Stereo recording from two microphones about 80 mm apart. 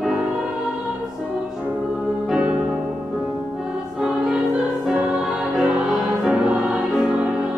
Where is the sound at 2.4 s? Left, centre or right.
Centre.